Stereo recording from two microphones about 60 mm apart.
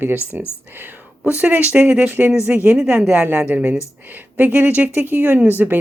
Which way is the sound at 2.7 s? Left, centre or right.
Centre.